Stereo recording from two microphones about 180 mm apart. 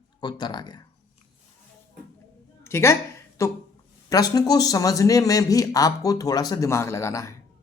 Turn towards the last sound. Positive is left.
turn(degrees=15)  # may be behind; listen again after turning